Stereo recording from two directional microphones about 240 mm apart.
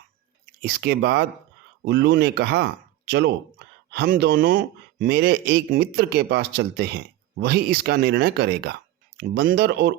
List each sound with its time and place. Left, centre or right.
0.6 s speech: right